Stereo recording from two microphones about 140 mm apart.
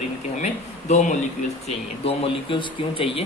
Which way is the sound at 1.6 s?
40° left (ahead or behind).